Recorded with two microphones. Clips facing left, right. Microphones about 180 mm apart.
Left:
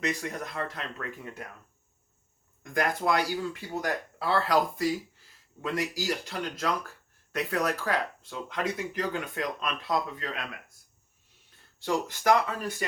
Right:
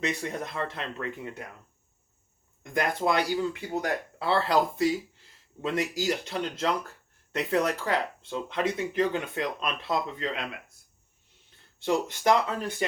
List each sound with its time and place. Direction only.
0.2 s speech: 25° right (ahead or behind)
2.7 s speech: 25° right (ahead or behind)
11.8 s speech: 25° right (ahead or behind)